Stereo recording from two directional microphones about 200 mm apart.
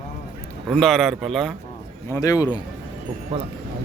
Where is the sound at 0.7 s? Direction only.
Centre (ahead or behind).